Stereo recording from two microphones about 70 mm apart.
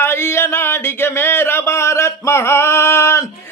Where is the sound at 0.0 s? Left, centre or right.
Left.